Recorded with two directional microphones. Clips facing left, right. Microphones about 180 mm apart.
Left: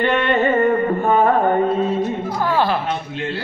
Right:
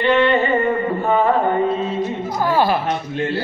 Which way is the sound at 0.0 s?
50° left (ahead or behind).